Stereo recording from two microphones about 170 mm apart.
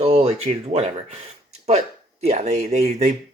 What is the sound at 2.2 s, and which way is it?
Speech, 40° right (ahead or behind).